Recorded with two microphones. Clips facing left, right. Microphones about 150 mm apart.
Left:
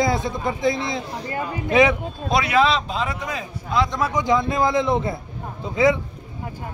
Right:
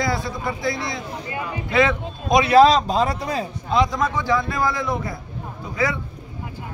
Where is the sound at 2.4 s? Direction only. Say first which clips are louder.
Right 7 dB; 35° right (ahead or behind).